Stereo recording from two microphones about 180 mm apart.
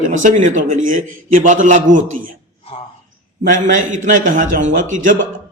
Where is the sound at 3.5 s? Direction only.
45° right (ahead or behind).